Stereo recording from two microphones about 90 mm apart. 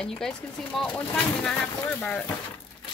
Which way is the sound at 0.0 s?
5° left (ahead or behind).